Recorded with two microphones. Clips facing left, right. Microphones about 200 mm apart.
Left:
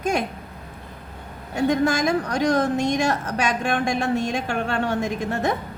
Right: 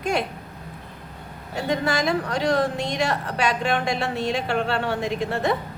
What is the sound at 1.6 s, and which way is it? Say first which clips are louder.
A woman's voice: left 4 dB; 45° left (ahead or behind).